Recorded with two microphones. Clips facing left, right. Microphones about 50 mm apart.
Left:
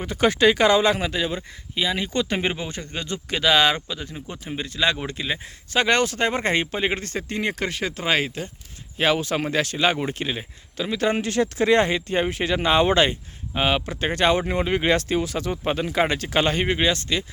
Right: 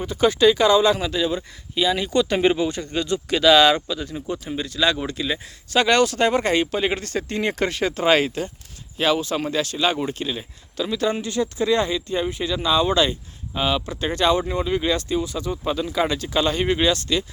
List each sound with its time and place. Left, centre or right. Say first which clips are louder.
0.0 s speech: right 1 dB; left
1.7 s speech: right 4 dB; centre
7.2 s speech: right 5 dB; centre
9.0 s speech: even; left
11.0 s speech: left 2 dB; left
14.9 s speech: left 1 dB; left
15.6 s speech: even; left
16.6 s speech: right 2 dB; left